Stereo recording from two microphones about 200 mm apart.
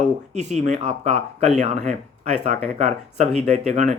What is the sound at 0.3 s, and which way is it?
Speech, 35° right (ahead or behind).